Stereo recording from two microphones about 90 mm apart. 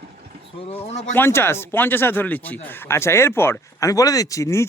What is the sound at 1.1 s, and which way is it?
Speech, 25° left (ahead or behind).